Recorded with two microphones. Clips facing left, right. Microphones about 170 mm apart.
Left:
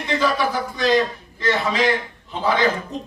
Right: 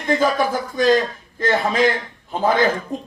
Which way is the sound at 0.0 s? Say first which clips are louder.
Right 3 dB; 50° right (ahead or behind).